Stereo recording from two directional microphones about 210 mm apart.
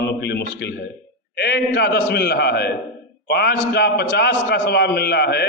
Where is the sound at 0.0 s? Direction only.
50° left (ahead or behind).